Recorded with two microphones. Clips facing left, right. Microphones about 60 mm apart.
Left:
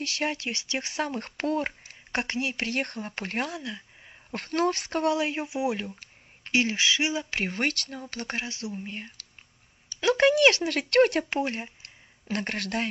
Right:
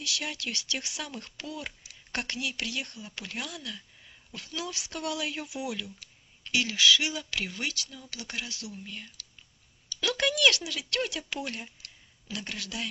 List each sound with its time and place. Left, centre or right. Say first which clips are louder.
0.0 s speech: left 5 dB; left
4.3 s speech: left 12 dB; left
10.7 s speech: left 11 dB; left
12.4 s speech: left 7 dB; left